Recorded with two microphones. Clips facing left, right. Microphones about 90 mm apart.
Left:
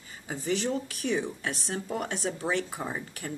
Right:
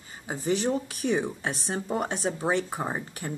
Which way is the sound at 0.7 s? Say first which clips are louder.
Right 3 dB; 20° right (ahead or behind).